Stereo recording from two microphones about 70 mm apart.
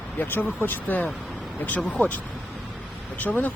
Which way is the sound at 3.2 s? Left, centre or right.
Left.